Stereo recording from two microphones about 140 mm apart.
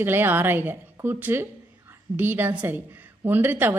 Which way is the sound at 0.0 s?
15° right (ahead or behind).